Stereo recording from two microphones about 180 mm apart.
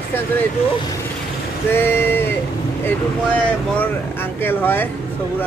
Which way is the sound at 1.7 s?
10° left (ahead or behind).